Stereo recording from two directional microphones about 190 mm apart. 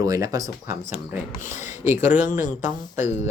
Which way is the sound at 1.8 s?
10° right (ahead or behind).